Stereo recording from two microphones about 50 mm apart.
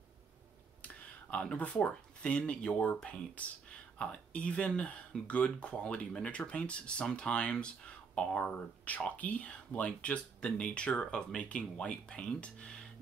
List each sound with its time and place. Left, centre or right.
0.8 s a sound: left
1.6 s speech: left
8.5 s speech: left